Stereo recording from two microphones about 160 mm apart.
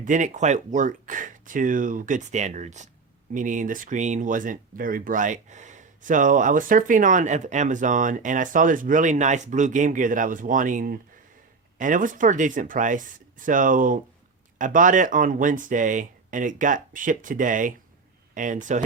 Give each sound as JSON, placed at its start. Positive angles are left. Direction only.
{"t": 0.0, "sound": "speech", "side_deg": -50}